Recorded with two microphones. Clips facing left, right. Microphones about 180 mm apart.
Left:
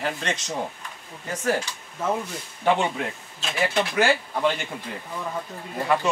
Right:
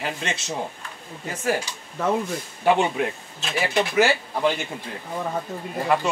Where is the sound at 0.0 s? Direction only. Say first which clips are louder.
Left 1 dB; 10° right (ahead or behind).